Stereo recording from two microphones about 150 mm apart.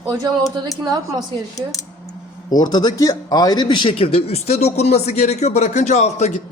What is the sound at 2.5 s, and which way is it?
Speech, 25° left (ahead or behind).